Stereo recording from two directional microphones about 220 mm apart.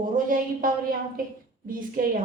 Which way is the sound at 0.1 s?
40° right (ahead or behind).